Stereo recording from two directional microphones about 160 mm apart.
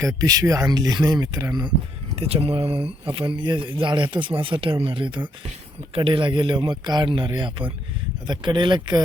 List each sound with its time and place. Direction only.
0.2 s speech: 25° right (ahead or behind)
2.1 s speech: 40° right (ahead or behind)